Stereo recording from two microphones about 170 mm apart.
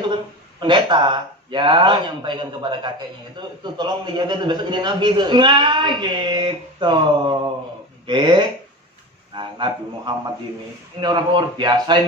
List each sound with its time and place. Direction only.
0.6 s a man's voice: 25° right (ahead or behind)